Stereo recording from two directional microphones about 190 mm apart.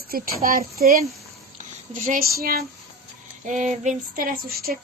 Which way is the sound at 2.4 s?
50° right (ahead or behind).